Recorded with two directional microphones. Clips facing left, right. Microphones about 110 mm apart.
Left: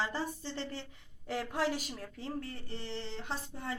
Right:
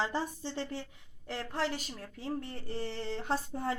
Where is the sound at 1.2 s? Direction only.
10° left (ahead or behind).